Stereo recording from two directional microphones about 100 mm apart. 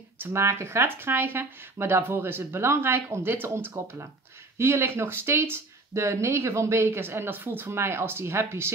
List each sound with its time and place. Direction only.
0.2 s speech: 25° right (ahead or behind)